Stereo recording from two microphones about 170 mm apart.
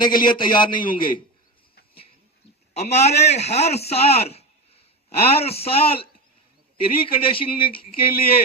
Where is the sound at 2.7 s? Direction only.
40° left (ahead or behind).